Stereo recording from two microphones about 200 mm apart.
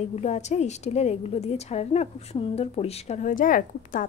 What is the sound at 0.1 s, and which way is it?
A woman's voice, 35° left (ahead or behind).